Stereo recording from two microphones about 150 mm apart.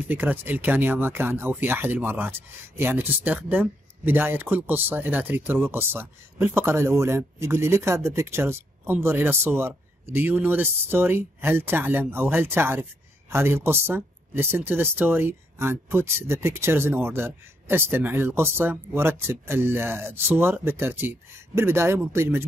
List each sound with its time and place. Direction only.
0.0 s speech: 10° right (ahead or behind)